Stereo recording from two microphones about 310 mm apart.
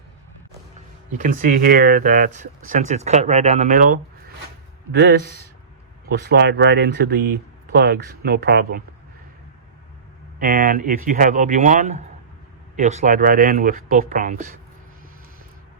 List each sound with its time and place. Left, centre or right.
1.2 s speech: right
10.4 s speech: right